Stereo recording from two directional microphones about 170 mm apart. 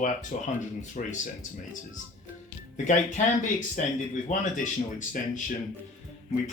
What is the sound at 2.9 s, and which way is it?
Speech, 45° left (ahead or behind).